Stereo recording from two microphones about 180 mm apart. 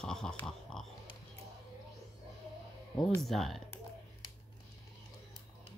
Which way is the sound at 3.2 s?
Centre (ahead or behind).